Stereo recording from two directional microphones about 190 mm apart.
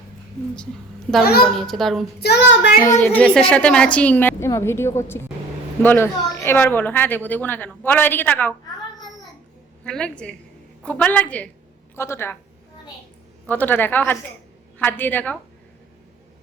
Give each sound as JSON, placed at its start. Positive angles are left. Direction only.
{"t": 1.5, "sound": "a child's voice", "side_deg": 0}
{"t": 2.2, "sound": "child singing", "side_deg": 65}
{"t": 2.8, "sound": "a woman's voice", "side_deg": 10}
{"t": 9.8, "sound": "a child's voice", "side_deg": 5}
{"t": 13.5, "sound": "a woman's voice", "side_deg": 10}